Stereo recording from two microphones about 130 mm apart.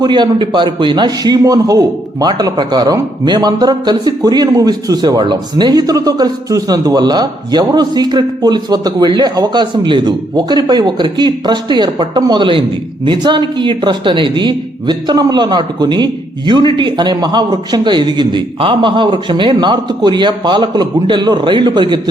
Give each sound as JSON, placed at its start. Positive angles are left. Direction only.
{"t": 0.0, "sound": "a man's voice", "side_deg": -35}